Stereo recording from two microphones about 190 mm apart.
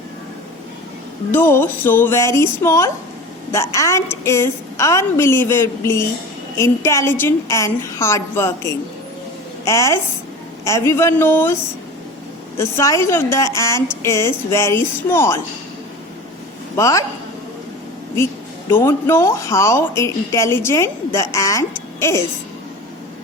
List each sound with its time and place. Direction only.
1.3 s a woman's voice: 10° left (ahead or behind)
12.5 s a woman's voice: 15° left (ahead or behind)
16.7 s a woman's voice: 15° left (ahead or behind)
18.7 s a woman's voice: 15° left (ahead or behind)